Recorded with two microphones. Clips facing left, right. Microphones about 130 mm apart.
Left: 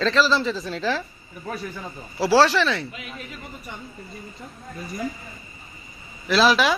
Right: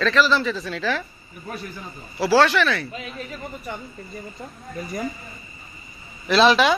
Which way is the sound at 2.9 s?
35° right (ahead or behind).